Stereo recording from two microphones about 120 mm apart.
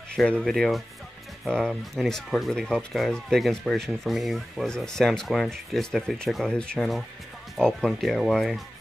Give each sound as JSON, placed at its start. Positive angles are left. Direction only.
{"t": 0.1, "sound": "speech", "side_deg": 5}